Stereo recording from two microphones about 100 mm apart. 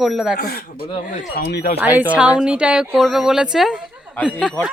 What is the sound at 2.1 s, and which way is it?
A woman's voice, 15° right (ahead or behind).